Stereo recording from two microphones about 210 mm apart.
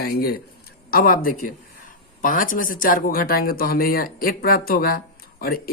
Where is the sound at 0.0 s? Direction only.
45° left (ahead or behind).